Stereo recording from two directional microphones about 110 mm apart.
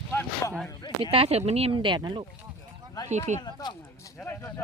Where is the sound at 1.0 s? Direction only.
60° right (ahead or behind).